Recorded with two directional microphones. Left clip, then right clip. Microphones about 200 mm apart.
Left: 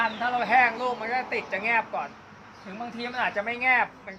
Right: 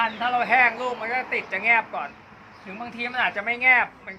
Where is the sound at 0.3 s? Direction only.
15° left (ahead or behind).